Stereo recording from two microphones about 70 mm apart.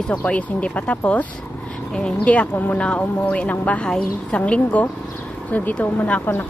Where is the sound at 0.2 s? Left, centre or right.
Centre.